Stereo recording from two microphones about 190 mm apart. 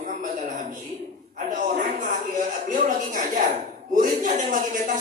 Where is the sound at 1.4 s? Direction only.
45° right (ahead or behind).